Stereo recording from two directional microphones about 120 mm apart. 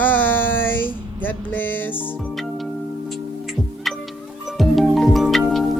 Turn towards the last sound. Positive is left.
turn(degrees=0)  # may be behind; listen again after turning